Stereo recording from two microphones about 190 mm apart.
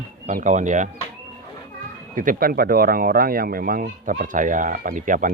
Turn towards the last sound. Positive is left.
turn(degrees=-45)  # may be behind; listen again after turning